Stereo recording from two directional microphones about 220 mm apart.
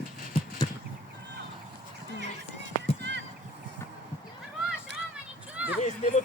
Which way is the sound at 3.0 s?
50° right (ahead or behind).